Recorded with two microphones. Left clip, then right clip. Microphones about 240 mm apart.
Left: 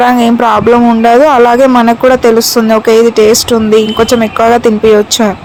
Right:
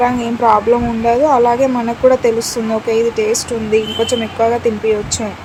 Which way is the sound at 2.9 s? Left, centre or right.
Left.